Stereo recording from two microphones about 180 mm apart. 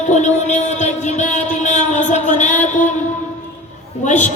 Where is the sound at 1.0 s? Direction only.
40° left (ahead or behind).